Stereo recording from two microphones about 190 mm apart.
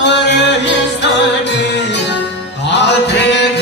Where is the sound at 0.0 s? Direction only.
65° left (ahead or behind).